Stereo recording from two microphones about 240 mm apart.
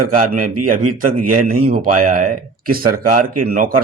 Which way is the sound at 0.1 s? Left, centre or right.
Right.